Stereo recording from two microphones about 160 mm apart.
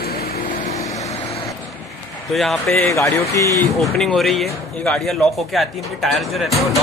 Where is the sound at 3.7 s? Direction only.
Centre (ahead or behind).